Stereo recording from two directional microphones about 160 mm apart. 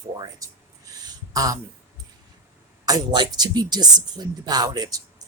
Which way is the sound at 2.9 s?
25° right (ahead or behind).